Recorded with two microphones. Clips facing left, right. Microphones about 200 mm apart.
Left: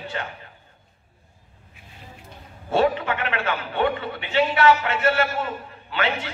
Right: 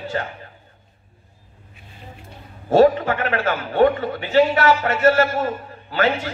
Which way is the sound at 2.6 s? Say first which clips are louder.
Right 7 dB; 40° right (ahead or behind).